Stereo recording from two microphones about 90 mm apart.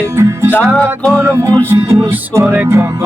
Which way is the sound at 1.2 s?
35° right (ahead or behind).